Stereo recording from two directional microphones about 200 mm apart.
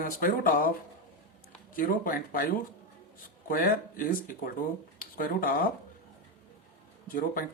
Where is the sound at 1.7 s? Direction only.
45° left (ahead or behind).